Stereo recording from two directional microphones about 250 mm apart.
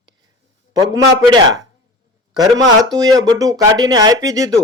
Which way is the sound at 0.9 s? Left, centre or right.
Centre.